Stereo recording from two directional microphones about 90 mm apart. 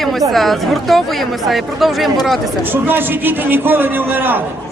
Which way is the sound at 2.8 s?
20° right (ahead or behind).